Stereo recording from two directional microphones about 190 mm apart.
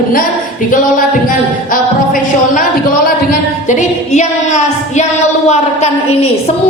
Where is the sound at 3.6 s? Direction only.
40° left (ahead or behind).